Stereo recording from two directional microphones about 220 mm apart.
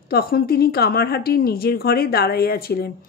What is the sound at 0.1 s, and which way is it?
Speech, 45° left (ahead or behind).